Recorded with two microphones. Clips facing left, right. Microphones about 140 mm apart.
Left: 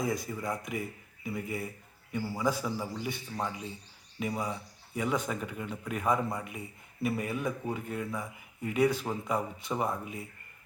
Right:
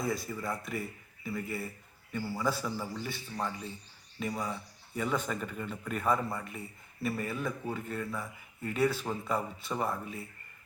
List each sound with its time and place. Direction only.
0.0 s speech: 15° left (ahead or behind)